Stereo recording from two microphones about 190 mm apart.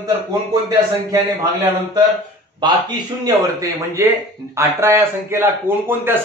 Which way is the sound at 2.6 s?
20° right (ahead or behind).